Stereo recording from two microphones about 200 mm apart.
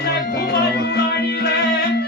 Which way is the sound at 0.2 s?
55° left (ahead or behind).